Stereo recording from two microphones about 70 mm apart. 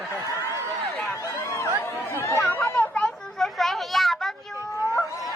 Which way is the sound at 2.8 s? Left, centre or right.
Centre.